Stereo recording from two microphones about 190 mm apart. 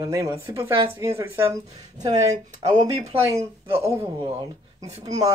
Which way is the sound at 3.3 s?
15° right (ahead or behind).